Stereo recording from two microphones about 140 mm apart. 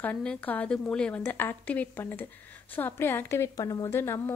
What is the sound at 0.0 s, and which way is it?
A woman's voice, 10° left (ahead or behind).